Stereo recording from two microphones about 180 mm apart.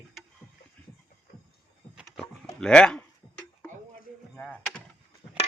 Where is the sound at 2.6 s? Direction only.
5° left (ahead or behind).